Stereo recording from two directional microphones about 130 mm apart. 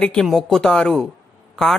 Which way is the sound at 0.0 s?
5° left (ahead or behind).